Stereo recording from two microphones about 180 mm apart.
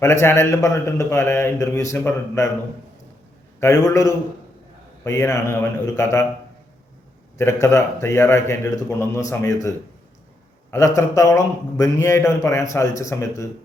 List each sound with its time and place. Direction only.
0.0 s a man's voice: 15° left (ahead or behind)
3.6 s a man's voice: 15° left (ahead or behind)
7.3 s a man's voice: 15° left (ahead or behind)